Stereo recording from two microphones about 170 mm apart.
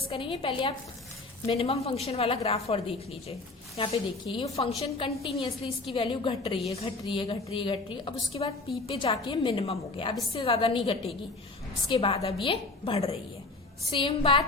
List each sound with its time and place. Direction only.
0.1 s a woman's voice: 30° left (ahead or behind)
4.5 s a woman's voice: 35° left (ahead or behind)